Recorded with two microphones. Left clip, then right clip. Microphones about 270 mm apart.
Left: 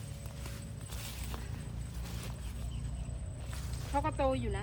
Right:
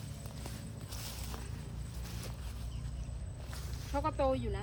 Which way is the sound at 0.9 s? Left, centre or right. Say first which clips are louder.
Left 1 dB; centre.